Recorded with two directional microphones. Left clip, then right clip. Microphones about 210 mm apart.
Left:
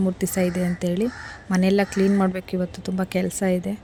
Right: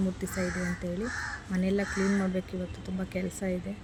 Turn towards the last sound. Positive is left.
turn(degrees=50)  # may be behind; listen again after turning